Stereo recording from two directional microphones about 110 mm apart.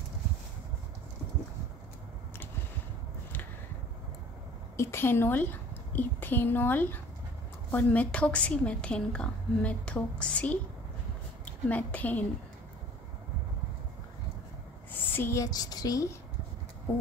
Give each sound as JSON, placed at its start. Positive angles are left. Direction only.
{"t": 4.7, "sound": "a woman's voice", "side_deg": 25}
{"t": 14.9, "sound": "a sound", "side_deg": 20}
{"t": 15.4, "sound": "speech", "side_deg": 35}